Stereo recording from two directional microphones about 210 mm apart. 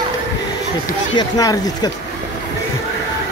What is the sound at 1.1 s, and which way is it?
Speech, 20° left (ahead or behind).